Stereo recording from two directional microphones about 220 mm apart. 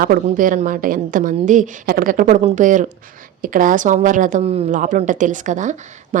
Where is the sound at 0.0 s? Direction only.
40° right (ahead or behind).